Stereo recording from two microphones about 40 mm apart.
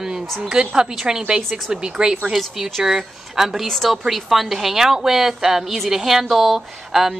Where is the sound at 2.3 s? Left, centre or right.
Centre.